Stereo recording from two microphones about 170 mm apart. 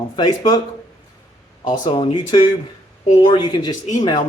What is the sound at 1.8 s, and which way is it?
Speech, 35° left (ahead or behind).